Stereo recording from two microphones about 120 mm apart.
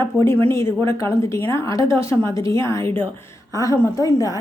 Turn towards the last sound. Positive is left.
turn(degrees=30)  # may be behind; listen again after turning